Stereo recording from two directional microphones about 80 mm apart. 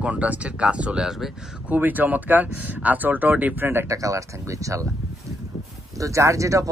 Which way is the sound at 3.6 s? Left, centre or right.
Right.